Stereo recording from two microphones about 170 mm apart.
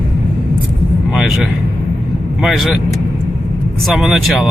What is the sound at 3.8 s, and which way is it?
Speech, centre (ahead or behind).